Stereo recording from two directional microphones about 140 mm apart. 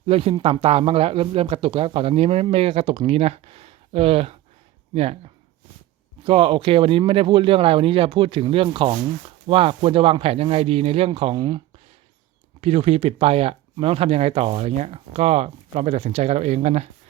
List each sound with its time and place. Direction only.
0.1 s speech: 45° right (ahead or behind)
12.6 s speech: 45° right (ahead or behind)